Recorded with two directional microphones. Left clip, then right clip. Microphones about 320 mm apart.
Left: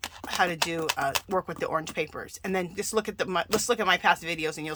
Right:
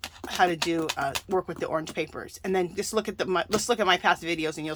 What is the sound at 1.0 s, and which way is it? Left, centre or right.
Speech, centre.